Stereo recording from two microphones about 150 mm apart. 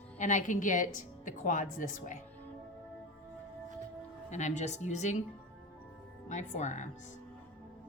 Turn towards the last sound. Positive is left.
turn(degrees=50)  # may be behind; listen again after turning